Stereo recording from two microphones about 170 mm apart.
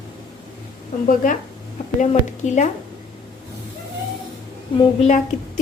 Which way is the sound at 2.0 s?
45° left (ahead or behind).